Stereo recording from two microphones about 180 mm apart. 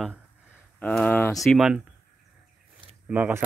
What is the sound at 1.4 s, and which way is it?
Speech, centre (ahead or behind).